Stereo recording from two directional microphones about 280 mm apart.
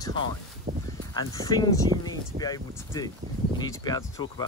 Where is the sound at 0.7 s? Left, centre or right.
Right.